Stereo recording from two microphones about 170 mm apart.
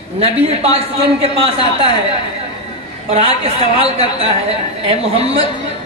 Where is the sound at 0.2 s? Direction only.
35° right (ahead or behind).